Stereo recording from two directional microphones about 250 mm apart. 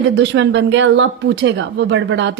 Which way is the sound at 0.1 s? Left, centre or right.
Right.